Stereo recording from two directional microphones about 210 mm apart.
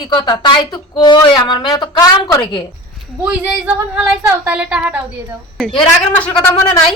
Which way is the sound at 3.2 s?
5° right (ahead or behind).